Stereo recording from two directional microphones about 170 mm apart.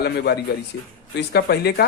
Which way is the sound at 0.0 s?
70° left (ahead or behind).